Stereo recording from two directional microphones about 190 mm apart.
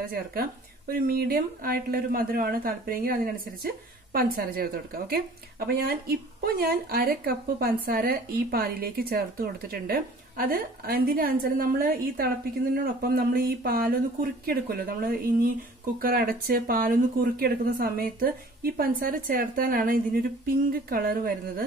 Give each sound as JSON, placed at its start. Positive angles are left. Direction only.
{"t": 0.0, "sound": "speech", "side_deg": -50}